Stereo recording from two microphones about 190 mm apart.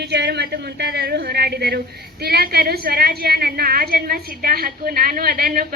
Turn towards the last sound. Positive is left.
turn(degrees=-50)  # may be behind; listen again after turning